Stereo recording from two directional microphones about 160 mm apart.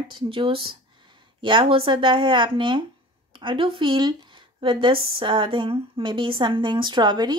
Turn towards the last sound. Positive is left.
turn(degrees=-25)  # may be behind; listen again after turning